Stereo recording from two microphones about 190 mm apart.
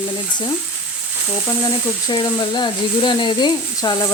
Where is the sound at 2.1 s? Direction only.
20° left (ahead or behind).